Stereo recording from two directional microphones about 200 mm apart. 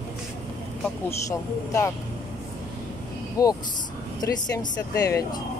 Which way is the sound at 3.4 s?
20° left (ahead or behind).